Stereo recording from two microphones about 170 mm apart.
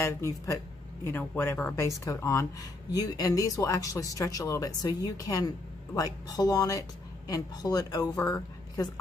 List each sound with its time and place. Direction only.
0.0 s speech: 15° left (ahead or behind)